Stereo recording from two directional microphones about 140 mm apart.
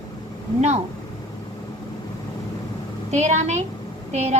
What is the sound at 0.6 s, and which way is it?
Speech, 50° right (ahead or behind).